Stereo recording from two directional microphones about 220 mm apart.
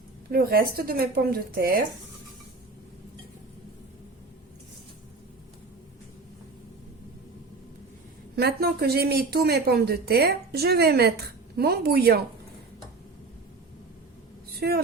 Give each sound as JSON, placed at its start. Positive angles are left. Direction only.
{"t": 0.3, "sound": "a woman's voice", "side_deg": -45}
{"t": 8.4, "sound": "speech", "side_deg": -45}
{"t": 14.6, "sound": "speech", "side_deg": -45}